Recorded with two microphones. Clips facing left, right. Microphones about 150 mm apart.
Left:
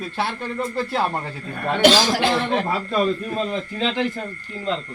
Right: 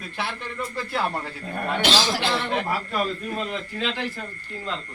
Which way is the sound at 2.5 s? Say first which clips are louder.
Left 4 dB; 25° left (ahead or behind).